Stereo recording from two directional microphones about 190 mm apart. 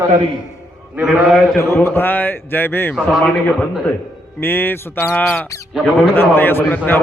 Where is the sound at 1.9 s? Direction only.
10° left (ahead or behind).